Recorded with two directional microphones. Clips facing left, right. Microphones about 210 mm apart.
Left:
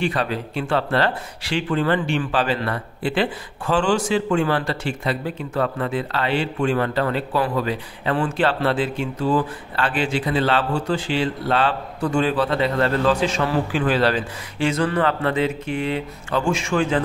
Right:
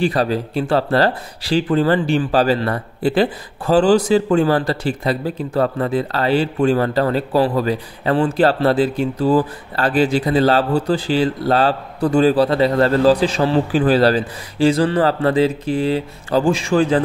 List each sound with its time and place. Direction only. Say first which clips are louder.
0.0 s speech: right 5 dB; 35° right (ahead or behind)